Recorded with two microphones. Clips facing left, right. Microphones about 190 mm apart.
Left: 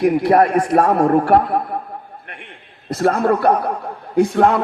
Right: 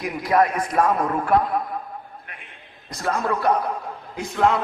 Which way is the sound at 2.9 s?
60° left (ahead or behind).